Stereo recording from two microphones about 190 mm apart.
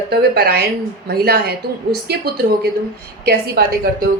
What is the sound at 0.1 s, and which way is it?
A woman's voice, 55° right (ahead or behind).